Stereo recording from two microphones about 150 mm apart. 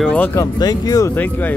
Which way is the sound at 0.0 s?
10° left (ahead or behind).